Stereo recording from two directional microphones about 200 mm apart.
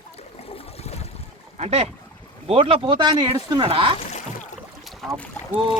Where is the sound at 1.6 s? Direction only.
30° right (ahead or behind).